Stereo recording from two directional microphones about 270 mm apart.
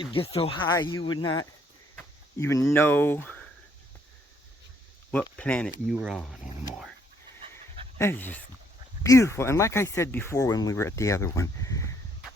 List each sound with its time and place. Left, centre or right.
0.0 s speech: centre
5.4 s speech: centre
7.9 s speech: centre